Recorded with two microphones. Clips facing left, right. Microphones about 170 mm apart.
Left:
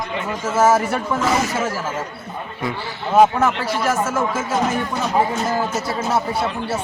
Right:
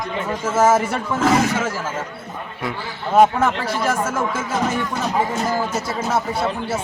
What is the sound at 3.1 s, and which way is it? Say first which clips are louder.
A man's voice: even; 5° left (ahead or behind).